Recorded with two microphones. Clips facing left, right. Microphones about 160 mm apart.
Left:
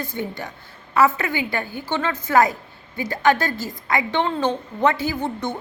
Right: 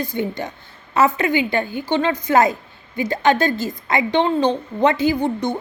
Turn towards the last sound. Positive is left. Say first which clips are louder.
# right 6 dB
turn(degrees=-15)  # may be behind; listen again after turning